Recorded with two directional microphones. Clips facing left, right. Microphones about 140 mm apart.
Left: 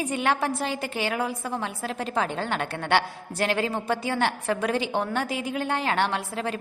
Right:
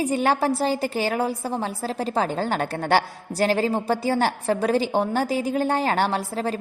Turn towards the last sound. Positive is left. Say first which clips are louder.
# right 4 dB
turn(degrees=-35)  # may be behind; listen again after turning